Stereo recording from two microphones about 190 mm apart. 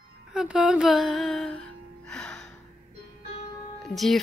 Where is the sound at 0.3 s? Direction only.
5° right (ahead or behind).